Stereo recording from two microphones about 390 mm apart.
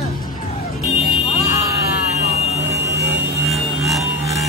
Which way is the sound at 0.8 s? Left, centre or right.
Centre.